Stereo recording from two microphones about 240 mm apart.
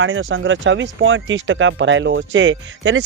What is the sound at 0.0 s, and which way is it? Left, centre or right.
Speech, right.